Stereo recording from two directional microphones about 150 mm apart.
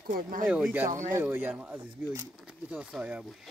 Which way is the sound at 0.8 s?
60° right (ahead or behind).